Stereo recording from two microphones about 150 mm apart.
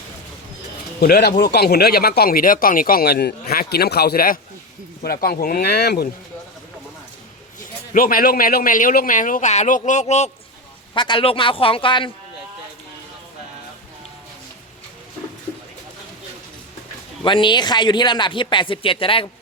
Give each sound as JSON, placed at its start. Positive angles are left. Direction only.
{"t": 0.9, "sound": "speech", "side_deg": 90}
{"t": 7.6, "sound": "a man's voice", "side_deg": 70}
{"t": 10.9, "sound": "speech", "side_deg": 30}
{"t": 17.2, "sound": "speech", "side_deg": 35}